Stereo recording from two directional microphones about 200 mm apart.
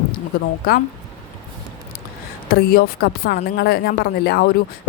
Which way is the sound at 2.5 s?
50° left (ahead or behind).